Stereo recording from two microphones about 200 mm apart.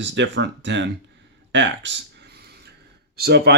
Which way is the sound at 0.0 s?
65° right (ahead or behind).